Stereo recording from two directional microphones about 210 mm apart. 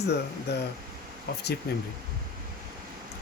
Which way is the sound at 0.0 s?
55° left (ahead or behind).